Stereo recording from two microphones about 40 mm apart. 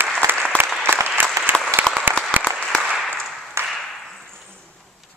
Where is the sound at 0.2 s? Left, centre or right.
Right.